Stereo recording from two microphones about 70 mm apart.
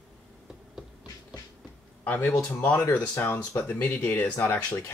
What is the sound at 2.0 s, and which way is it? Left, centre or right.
Speech, left.